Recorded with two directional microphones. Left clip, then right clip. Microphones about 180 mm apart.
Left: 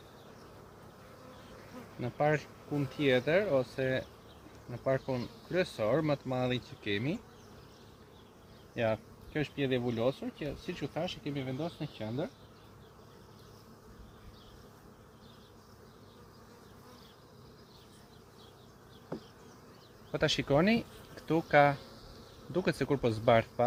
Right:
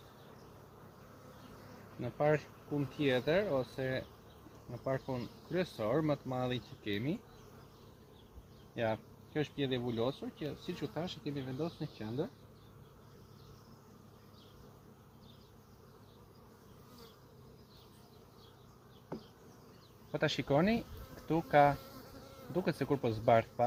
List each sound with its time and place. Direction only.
2.0 s speech: 40° left (ahead or behind)
8.7 s speech: 35° left (ahead or behind)
20.1 s speech: 35° left (ahead or behind)